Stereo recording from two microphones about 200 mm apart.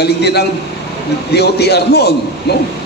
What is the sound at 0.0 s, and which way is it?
A man's voice, 55° left (ahead or behind).